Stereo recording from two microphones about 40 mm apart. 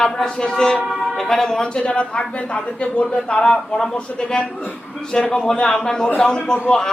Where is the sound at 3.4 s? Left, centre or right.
Centre.